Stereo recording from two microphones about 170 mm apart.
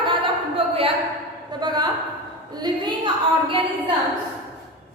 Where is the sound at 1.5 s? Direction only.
25° right (ahead or behind).